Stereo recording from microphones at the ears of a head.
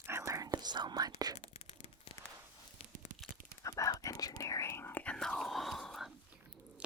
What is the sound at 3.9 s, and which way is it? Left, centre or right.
Speech, left.